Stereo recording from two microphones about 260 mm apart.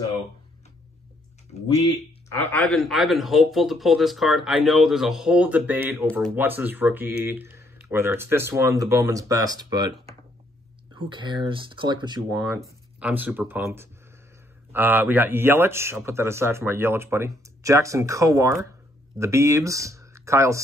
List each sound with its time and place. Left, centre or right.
2.2 s speech: centre